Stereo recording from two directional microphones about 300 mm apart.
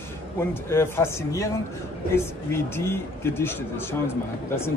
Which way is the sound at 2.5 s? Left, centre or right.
Centre.